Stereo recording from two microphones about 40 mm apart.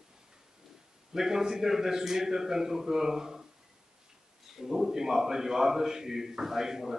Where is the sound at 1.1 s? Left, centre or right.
Centre.